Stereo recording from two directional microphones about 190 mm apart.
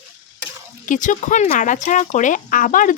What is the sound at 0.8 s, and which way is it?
Speech, 40° left (ahead or behind).